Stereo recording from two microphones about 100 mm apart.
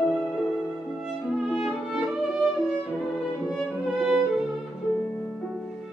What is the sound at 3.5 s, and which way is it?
Music, 5° right (ahead or behind).